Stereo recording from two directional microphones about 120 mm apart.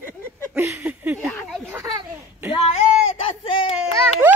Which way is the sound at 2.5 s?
55° left (ahead or behind).